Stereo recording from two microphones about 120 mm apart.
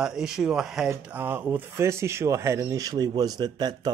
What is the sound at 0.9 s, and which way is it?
Speech, 20° right (ahead or behind).